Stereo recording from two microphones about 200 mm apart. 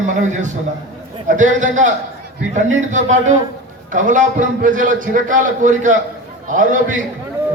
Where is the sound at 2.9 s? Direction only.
35° right (ahead or behind).